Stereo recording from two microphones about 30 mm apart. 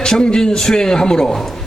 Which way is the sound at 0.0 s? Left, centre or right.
Left.